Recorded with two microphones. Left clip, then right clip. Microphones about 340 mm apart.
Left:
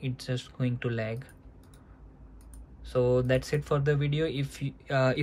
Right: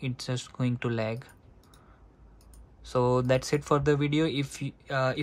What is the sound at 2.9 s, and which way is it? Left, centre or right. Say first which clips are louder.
Speech: right 1 dB; centre.